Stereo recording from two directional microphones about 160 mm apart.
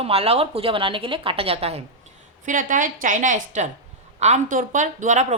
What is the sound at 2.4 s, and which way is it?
A woman's voice, 55° right (ahead or behind).